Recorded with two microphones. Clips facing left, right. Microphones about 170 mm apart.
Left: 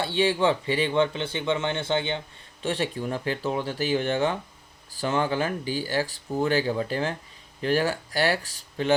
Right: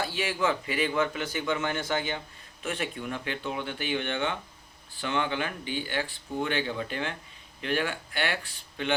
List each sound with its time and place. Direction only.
0.0 s speech: 30° left (ahead or behind)